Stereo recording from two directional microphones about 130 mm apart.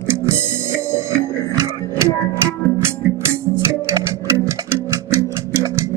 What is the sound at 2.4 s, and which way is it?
Music, 20° right (ahead or behind).